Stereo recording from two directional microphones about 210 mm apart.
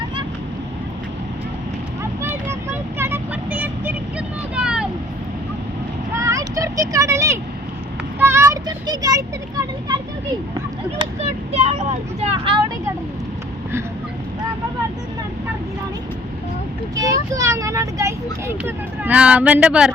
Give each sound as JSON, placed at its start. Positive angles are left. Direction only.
{"t": 2.2, "sound": "vehicle", "side_deg": -10}
{"t": 6.1, "sound": "vehicle", "side_deg": -15}
{"t": 8.2, "sound": "a child's voice", "side_deg": -10}
{"t": 11.5, "sound": "speech", "side_deg": -30}
{"t": 16.9, "sound": "speech", "side_deg": -15}